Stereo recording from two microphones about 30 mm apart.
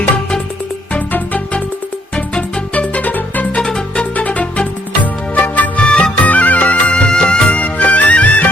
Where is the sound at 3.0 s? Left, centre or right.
Left.